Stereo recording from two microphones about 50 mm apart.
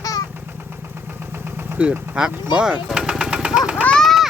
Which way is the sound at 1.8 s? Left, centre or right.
Right.